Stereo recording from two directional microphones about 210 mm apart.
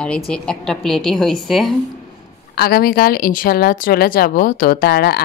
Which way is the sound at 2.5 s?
45° left (ahead or behind).